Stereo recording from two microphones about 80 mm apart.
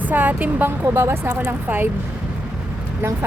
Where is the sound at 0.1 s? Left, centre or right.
Right.